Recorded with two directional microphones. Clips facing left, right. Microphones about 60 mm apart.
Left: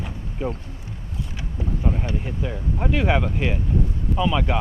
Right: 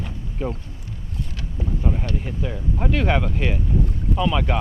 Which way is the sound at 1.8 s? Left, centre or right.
Centre.